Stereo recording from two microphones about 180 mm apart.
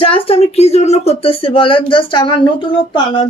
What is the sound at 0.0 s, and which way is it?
A woman's voice, 30° left (ahead or behind).